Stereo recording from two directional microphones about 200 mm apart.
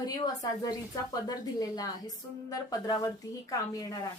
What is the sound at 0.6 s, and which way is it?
A woman's voice, 20° left (ahead or behind).